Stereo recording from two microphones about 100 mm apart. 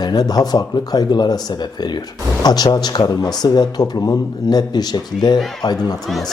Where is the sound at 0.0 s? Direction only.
45° left (ahead or behind).